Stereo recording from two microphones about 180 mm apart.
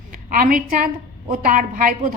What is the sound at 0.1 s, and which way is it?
A woman's voice, 50° right (ahead or behind).